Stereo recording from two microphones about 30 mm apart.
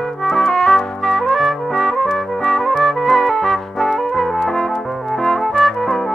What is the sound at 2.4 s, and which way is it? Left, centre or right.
Music, centre.